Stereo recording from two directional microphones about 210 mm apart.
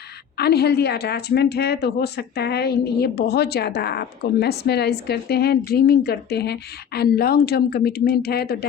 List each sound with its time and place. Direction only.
0.3 s speech: 50° left (ahead or behind)